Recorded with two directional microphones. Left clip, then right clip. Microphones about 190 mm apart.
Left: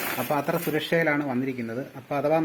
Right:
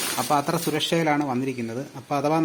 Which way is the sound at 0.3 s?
45° right (ahead or behind).